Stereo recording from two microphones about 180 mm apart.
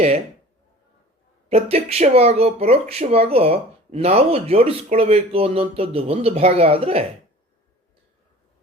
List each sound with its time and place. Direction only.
1.5 s speech: 35° right (ahead or behind)